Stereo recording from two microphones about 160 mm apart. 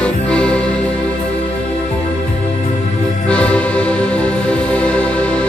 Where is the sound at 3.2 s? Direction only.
5° left (ahead or behind).